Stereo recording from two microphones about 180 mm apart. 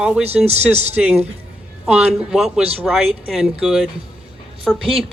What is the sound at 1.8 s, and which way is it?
A woman's voice, 5° right (ahead or behind).